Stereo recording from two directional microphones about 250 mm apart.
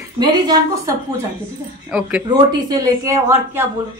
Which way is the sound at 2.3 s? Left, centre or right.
Centre.